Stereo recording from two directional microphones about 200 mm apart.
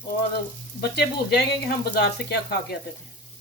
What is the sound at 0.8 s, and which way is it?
Speech, 55° left (ahead or behind).